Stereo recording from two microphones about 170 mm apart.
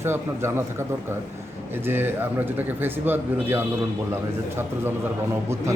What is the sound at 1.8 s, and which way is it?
Speech, 10° right (ahead or behind).